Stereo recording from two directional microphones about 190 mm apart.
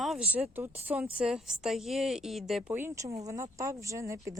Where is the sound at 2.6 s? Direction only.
10° right (ahead or behind).